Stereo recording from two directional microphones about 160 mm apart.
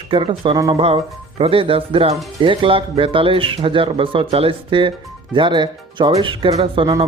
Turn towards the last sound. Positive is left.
turn(degrees=-30)  # may be behind; listen again after turning